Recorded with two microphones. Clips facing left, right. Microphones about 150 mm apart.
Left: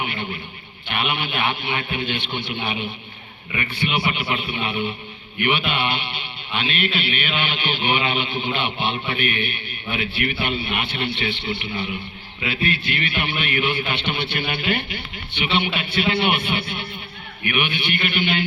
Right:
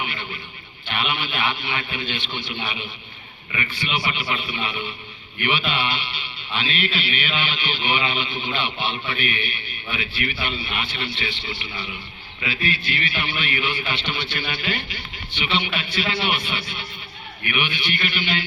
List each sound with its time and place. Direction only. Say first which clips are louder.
0.9 s a man's voice: left 2 dB; 55° left (ahead or behind)